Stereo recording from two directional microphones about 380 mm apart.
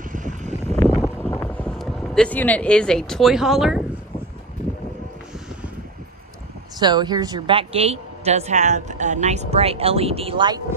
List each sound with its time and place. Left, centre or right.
0.1 s a sound: centre
0.8 s vehicle: centre
6.8 s a woman's voice: centre